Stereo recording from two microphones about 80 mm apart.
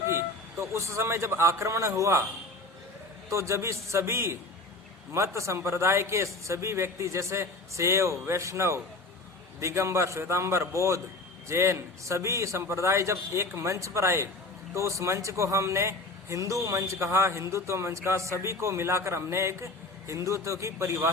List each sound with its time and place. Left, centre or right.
0.6 s a man's voice: right
3.2 s a man's voice: right